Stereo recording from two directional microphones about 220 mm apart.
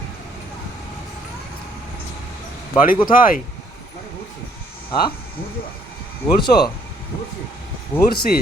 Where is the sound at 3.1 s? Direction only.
40° left (ahead or behind).